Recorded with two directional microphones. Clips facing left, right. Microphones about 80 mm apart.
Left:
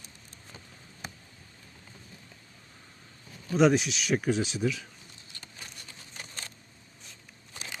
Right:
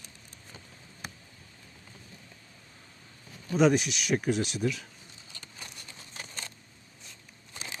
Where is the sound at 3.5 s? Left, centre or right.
Centre.